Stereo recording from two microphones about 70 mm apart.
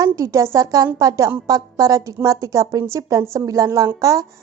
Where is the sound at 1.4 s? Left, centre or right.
Right.